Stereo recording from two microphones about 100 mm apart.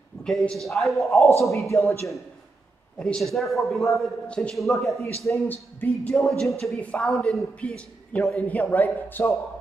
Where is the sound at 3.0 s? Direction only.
5° left (ahead or behind).